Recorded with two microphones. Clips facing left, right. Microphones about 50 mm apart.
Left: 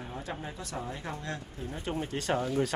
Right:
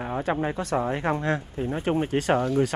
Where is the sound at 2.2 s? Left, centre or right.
Right.